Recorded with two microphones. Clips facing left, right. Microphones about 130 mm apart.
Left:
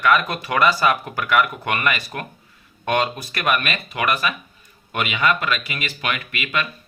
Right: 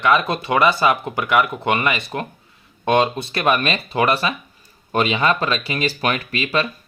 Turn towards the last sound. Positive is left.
turn(degrees=-30)  # may be behind; listen again after turning